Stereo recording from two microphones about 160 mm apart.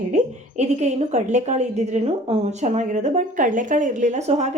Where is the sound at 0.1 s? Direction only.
45° right (ahead or behind).